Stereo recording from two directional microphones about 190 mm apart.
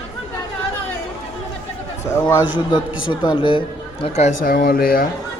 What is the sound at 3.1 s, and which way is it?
Speech, 25° left (ahead or behind).